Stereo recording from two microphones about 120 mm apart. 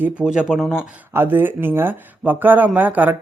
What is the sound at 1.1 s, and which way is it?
Speech, 20° right (ahead or behind).